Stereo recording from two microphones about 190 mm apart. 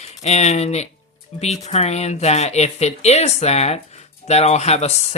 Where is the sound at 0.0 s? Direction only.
35° left (ahead or behind).